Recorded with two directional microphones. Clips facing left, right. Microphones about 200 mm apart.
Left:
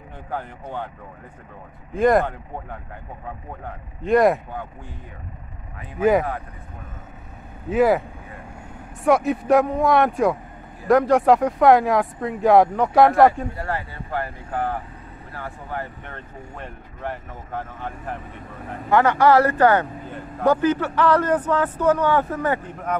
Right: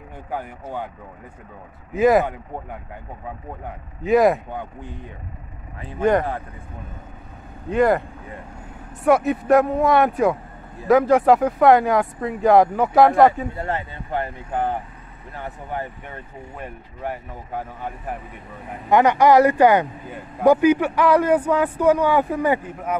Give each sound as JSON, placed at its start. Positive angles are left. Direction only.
{"t": 0.3, "sound": "speech", "side_deg": -10}
{"t": 2.0, "sound": "speech", "side_deg": -5}
{"t": 5.9, "sound": "speech", "side_deg": 5}
{"t": 7.7, "sound": "speech", "side_deg": 5}
{"t": 9.0, "sound": "speech", "side_deg": 0}
{"t": 13.6, "sound": "speech", "side_deg": -20}